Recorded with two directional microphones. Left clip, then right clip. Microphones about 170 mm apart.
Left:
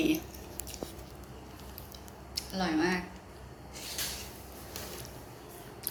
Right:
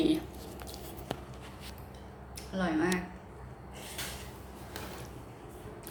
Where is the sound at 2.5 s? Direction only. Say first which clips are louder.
Even; 10° right (ahead or behind).